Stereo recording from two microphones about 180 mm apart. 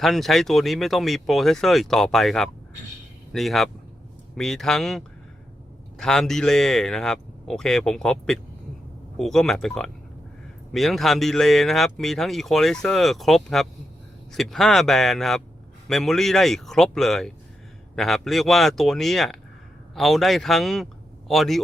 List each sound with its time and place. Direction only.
0.0 s speech: centre (ahead or behind)